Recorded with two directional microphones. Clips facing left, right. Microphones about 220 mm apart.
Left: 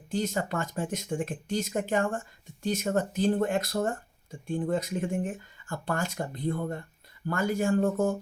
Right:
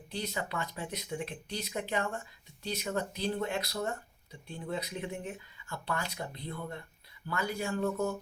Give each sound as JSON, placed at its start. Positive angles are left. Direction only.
{"t": 0.1, "sound": "speech", "side_deg": 45}